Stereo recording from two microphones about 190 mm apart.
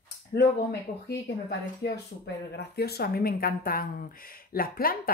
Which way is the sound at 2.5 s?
60° left (ahead or behind).